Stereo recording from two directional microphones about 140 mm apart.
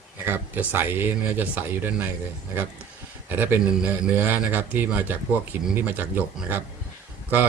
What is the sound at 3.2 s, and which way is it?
Speech, 15° right (ahead or behind).